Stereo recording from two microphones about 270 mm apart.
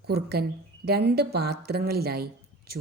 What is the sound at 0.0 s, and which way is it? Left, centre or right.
Speech, right.